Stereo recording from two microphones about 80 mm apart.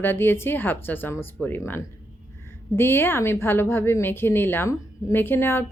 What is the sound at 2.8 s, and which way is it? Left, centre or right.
A woman's voice, left.